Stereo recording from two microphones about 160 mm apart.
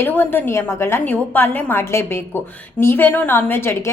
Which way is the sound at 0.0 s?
10° left (ahead or behind).